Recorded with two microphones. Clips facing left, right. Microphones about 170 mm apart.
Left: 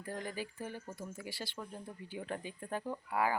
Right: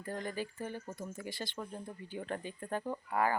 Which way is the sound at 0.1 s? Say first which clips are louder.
Right 2 dB; 10° left (ahead or behind).